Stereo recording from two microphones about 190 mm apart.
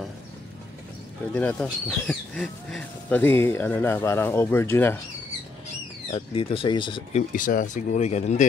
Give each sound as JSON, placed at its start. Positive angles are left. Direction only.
{"t": 1.3, "sound": "speech", "side_deg": 10}
{"t": 6.1, "sound": "speech", "side_deg": 30}